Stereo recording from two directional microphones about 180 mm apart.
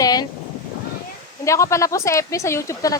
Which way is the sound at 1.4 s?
15° left (ahead or behind).